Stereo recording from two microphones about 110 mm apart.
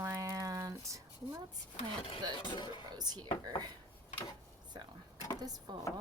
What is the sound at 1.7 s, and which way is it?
Speech, 55° left (ahead or behind).